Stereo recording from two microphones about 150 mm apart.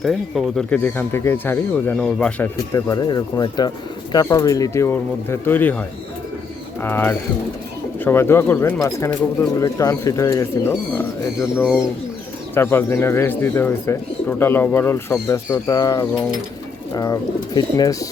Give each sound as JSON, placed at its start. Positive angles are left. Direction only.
{"t": 0.0, "sound": "speech", "side_deg": 0}
{"t": 2.7, "sound": "speech", "side_deg": 25}
{"t": 6.8, "sound": "speech", "side_deg": 15}